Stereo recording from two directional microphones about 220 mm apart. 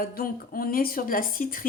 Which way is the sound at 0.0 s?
40° left (ahead or behind).